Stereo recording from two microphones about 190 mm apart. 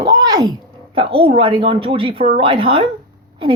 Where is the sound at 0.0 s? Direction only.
20° right (ahead or behind).